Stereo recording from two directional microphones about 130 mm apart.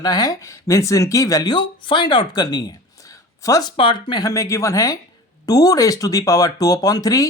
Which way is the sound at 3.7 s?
40° left (ahead or behind).